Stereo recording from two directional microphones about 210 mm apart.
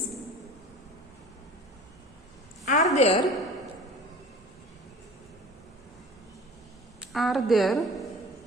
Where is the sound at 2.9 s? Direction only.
30° left (ahead or behind).